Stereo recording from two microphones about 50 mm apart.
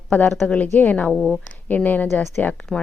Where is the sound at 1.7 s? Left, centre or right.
Left.